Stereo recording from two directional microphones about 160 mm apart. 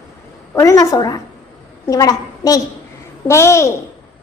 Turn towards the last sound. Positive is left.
turn(degrees=15)  # may be behind; listen again after turning